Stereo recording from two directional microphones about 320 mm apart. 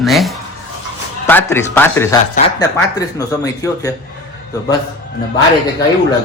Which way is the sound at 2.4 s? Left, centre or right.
Centre.